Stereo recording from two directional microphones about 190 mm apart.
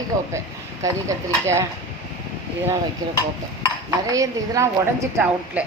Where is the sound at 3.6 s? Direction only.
15° right (ahead or behind).